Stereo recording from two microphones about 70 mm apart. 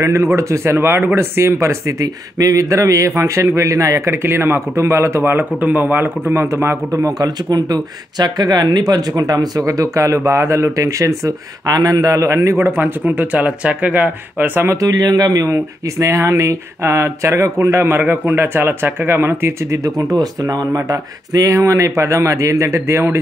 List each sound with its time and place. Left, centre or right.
0.0 s speech: right
5.2 s speech: right
6.5 s speech: right
7.2 s speech: right
12.5 s speech: right
12.8 s speech: right
14.7 s speech: right
19.8 s speech: right